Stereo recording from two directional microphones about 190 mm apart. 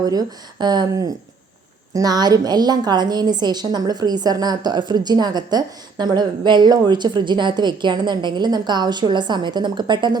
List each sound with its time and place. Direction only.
0.0 s a woman's voice: 20° right (ahead or behind)